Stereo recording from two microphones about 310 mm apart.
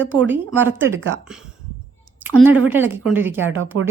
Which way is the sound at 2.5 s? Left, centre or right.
Centre.